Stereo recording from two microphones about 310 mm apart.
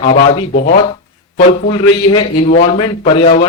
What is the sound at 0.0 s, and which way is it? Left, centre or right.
A man's voice, centre.